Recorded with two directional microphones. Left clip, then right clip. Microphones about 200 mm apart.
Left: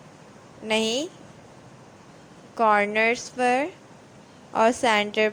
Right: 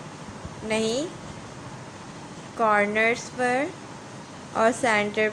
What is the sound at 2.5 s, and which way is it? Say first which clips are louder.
Speech: left 1 dB; 40° left (ahead or behind).